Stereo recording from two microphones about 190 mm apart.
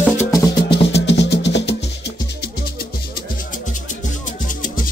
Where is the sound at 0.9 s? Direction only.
65° left (ahead or behind).